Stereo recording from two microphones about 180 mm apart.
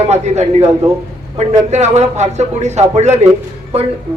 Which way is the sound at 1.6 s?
40° right (ahead or behind).